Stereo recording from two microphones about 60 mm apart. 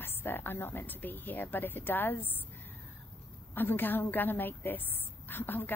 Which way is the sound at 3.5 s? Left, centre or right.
Left.